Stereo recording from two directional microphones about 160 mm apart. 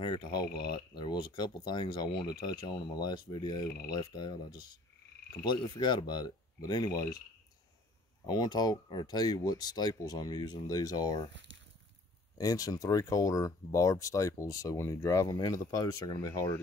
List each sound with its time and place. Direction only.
0.0 s speech: 30° left (ahead or behind)
8.3 s speech: 25° left (ahead or behind)
12.4 s speech: 20° left (ahead or behind)